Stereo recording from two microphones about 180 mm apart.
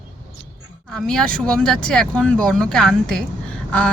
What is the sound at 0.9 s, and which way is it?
Speech, 5° left (ahead or behind).